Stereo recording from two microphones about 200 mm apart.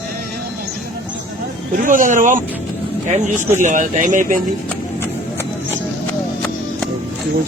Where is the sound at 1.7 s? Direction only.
40° right (ahead or behind).